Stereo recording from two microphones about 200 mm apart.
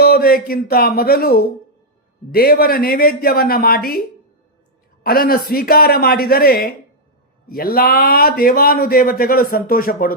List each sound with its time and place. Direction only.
0.0 s a man's voice: 50° left (ahead or behind)
5.0 s a man's voice: 45° left (ahead or behind)